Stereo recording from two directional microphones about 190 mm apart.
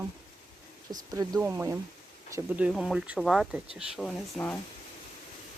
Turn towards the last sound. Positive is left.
turn(degrees=5)  # may be behind; listen again after turning